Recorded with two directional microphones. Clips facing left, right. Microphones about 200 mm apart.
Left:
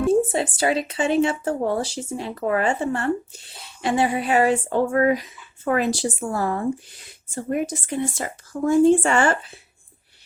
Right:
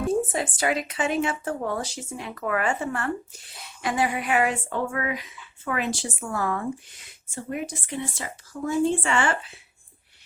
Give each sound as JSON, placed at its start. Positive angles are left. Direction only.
{"t": 0.1, "sound": "speech", "side_deg": 30}